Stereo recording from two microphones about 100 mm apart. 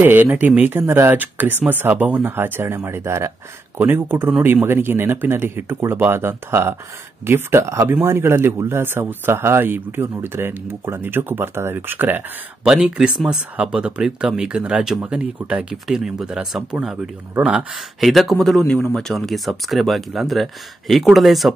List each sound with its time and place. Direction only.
0.0 s speech: 20° right (ahead or behind)
12.6 s speech: 5° right (ahead or behind)